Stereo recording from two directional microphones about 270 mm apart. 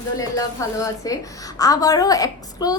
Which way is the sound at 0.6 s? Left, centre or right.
Centre.